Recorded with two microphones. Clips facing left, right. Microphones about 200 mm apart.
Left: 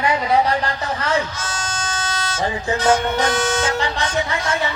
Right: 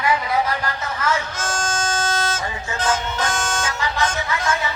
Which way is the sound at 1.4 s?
50° right (ahead or behind).